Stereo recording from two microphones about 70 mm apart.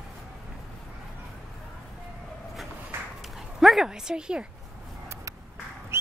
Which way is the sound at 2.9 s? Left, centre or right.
Right.